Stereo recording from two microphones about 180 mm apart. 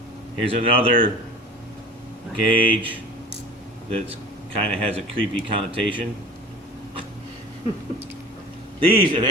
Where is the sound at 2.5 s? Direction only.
30° right (ahead or behind).